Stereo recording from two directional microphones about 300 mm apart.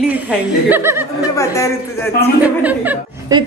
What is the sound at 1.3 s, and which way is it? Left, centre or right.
Speech, centre.